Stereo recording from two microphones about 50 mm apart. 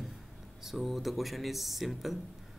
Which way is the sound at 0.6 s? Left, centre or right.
Centre.